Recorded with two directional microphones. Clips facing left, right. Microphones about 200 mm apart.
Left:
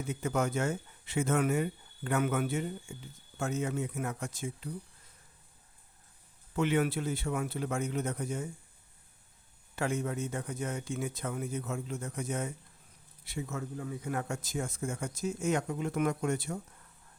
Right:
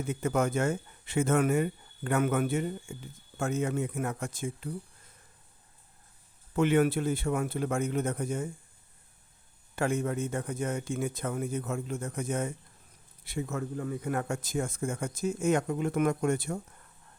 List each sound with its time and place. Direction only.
0.1 s speech: 55° right (ahead or behind)
6.6 s speech: 50° right (ahead or behind)
9.7 s speech: 50° right (ahead or behind)